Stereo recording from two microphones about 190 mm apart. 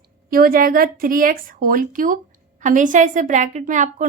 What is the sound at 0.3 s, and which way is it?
A woman's voice, 50° right (ahead or behind).